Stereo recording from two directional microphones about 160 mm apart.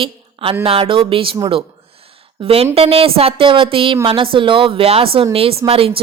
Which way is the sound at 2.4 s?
35° right (ahead or behind).